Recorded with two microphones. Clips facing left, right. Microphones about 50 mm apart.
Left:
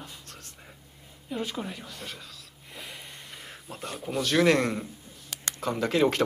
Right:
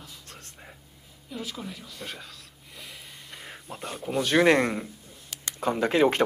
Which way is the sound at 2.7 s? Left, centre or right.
Centre.